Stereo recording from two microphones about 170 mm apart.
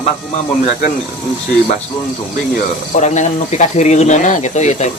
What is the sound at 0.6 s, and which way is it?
Speech, 45° left (ahead or behind).